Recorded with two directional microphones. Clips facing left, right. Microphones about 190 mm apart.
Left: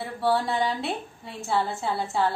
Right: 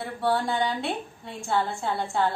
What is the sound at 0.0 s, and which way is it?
A woman's voice, centre (ahead or behind).